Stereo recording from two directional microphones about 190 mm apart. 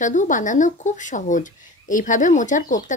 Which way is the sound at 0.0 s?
40° left (ahead or behind).